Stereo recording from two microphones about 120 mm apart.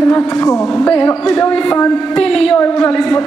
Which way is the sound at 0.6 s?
5° left (ahead or behind).